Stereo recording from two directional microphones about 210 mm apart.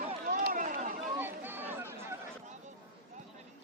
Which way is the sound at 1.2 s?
10° right (ahead or behind).